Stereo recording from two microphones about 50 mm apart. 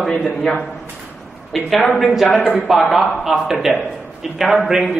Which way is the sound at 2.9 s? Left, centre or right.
Centre.